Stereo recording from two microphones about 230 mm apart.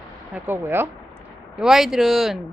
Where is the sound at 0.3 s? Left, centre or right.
Centre.